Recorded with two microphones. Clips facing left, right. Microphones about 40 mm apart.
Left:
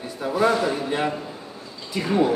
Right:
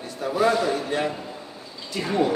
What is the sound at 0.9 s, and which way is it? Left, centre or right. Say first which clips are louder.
Speech: left 1 dB; centre.